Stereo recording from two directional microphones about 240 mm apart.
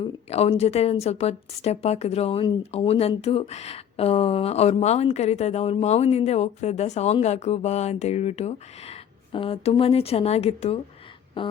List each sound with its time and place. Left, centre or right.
0.0 s speech: left